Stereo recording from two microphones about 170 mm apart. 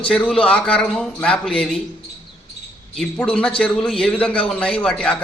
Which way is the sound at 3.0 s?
5° left (ahead or behind).